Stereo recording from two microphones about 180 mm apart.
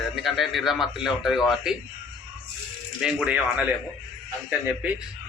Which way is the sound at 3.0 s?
5° right (ahead or behind).